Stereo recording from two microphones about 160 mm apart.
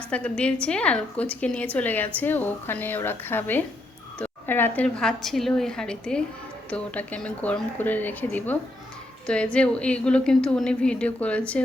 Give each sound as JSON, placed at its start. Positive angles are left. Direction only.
{"t": 0.1, "sound": "a woman's voice", "side_deg": 5}